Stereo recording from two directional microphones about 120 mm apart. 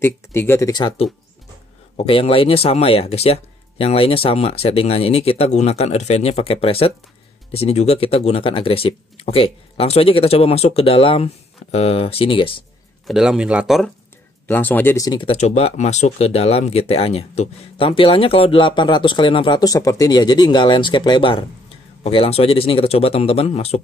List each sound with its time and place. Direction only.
0.0 s speech: 20° left (ahead or behind)
2.0 s speech: 55° left (ahead or behind)
13.0 s speech: 5° right (ahead or behind)
14.5 s speech: 15° left (ahead or behind)
15.0 s speech: 35° left (ahead or behind)
15.2 s speech: 65° left (ahead or behind)